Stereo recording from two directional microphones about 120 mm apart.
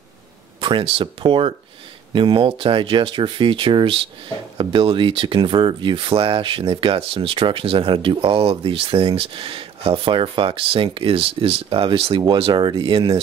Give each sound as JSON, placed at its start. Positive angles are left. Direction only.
{"t": 0.6, "sound": "speech", "side_deg": -45}